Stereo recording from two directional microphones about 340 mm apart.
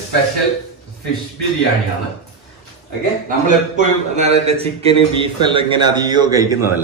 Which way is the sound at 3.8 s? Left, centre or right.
Centre.